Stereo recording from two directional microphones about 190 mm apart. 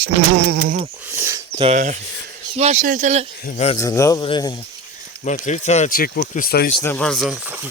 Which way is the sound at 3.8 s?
15° left (ahead or behind).